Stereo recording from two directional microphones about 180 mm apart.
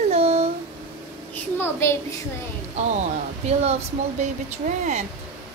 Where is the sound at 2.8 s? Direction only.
40° right (ahead or behind).